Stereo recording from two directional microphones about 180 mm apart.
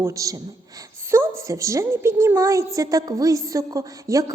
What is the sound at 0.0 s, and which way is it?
A woman's voice, 20° right (ahead or behind).